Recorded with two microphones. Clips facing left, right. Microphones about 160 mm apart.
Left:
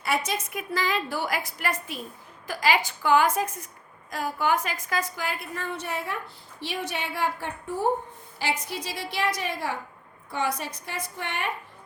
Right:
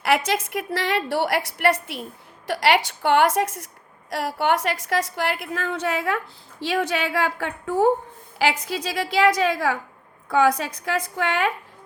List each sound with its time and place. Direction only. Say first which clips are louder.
0.0 s a woman's voice: right 6 dB; 90° right
4.1 s a woman's voice: right 4 dB; 75° right (ahead or behind); by 11.5 s 90° right